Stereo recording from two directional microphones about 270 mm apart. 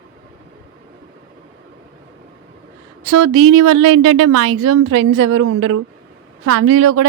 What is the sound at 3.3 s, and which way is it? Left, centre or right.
A woman's voice, right.